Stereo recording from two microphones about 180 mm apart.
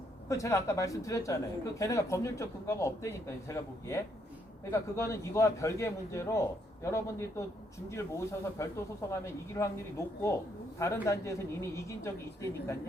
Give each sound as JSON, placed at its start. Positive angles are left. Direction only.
{"t": 0.3, "sound": "a man's voice", "side_deg": 15}
{"t": 10.8, "sound": "a man's voice", "side_deg": 15}